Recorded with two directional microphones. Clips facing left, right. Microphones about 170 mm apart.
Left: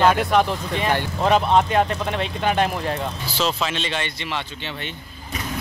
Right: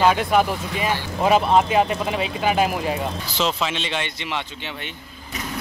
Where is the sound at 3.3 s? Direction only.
15° right (ahead or behind).